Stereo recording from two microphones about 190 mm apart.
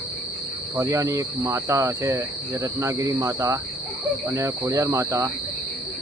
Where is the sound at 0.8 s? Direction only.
15° right (ahead or behind).